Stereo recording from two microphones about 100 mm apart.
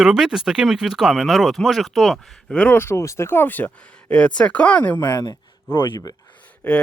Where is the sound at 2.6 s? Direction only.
20° left (ahead or behind).